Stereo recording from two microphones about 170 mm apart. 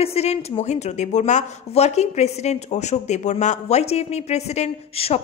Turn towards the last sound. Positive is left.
turn(degrees=35)  # may be behind; listen again after turning